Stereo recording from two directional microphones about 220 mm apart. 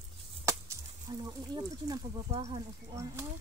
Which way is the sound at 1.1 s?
20° right (ahead or behind).